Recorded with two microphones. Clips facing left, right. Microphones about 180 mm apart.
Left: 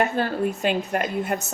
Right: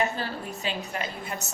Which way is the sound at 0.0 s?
55° left (ahead or behind).